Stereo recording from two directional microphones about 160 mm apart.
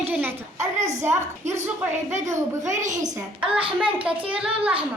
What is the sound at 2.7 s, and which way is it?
Speech, 50° right (ahead or behind).